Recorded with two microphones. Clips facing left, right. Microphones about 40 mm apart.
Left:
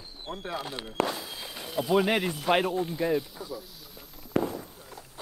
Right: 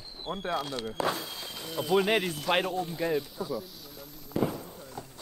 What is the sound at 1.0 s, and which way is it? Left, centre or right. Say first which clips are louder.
Speech: right 2 dB; centre.